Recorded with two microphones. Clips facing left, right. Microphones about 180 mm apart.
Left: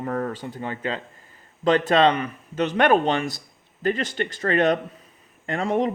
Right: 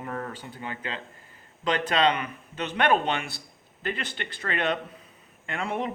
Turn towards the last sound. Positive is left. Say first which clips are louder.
# left 7 dB
turn(degrees=40)  # may be behind; listen again after turning